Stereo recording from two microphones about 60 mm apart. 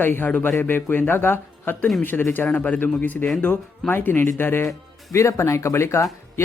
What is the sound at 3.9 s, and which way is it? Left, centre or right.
Speech, left.